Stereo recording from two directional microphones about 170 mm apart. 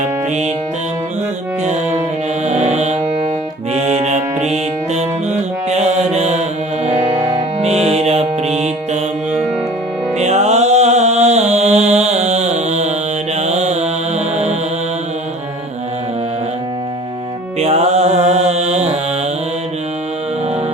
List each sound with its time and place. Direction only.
0.0 s music: 45° right (ahead or behind)
2.5 s music: 40° right (ahead or behind)
5.6 s mantra: 40° right (ahead or behind)
6.8 s music: 40° right (ahead or behind)
10.2 s music: 40° right (ahead or behind)
13.4 s mantra: 40° right (ahead or behind)
17.6 s mantra: 40° right (ahead or behind)